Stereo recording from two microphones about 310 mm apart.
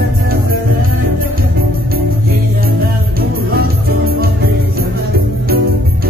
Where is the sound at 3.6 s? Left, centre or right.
Right.